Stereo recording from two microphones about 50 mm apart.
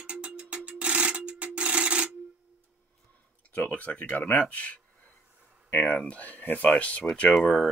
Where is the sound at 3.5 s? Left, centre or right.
Left.